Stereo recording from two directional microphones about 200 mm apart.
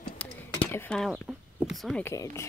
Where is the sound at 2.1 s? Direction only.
15° left (ahead or behind).